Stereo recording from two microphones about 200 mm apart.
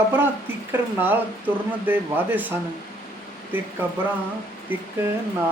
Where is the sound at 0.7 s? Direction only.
10° right (ahead or behind).